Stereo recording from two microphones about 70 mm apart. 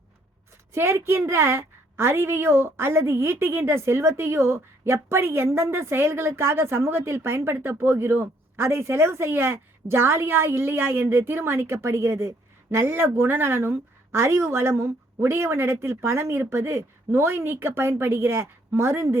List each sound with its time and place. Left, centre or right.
0.7 s a woman's voice: right